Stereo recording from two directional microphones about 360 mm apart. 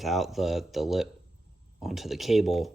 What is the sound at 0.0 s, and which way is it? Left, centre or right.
Speech, centre.